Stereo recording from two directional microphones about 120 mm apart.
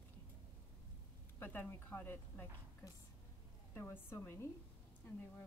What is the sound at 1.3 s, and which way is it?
Speech, 15° left (ahead or behind).